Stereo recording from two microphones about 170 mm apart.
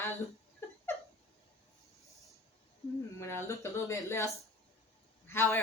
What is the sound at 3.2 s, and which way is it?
A woman's voice, 15° left (ahead or behind).